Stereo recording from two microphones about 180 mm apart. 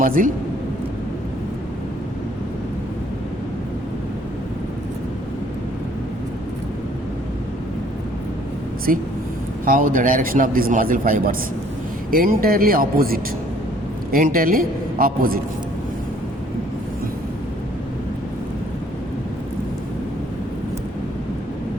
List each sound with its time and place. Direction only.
0.0 s a man's voice: 50° right (ahead or behind)
8.9 s a man's voice: 50° right (ahead or behind)